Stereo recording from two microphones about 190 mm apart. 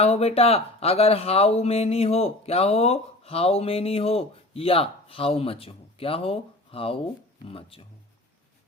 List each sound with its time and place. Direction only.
0.0 s speech: 35° left (ahead or behind)